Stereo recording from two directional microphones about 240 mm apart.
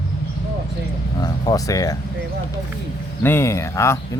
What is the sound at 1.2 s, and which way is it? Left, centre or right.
Speech, centre.